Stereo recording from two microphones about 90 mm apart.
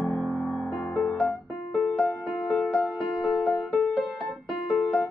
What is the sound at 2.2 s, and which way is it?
Music, centre (ahead or behind).